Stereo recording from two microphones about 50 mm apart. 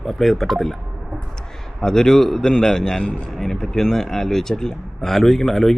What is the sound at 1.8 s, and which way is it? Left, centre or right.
Speech, centre.